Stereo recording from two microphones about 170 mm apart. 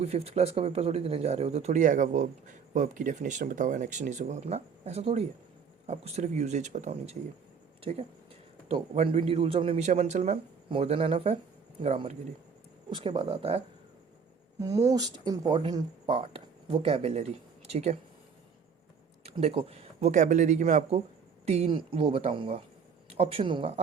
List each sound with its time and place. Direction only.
0.0 s speech: 40° right (ahead or behind)
14.6 s speech: 20° right (ahead or behind); by 18.0 s 40° right (ahead or behind)
19.2 s speech: 35° right (ahead or behind)